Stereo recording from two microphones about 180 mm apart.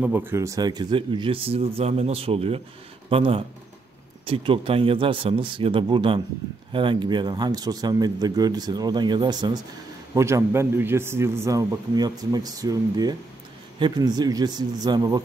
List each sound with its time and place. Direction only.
0.0 s a man's voice: 10° right (ahead or behind)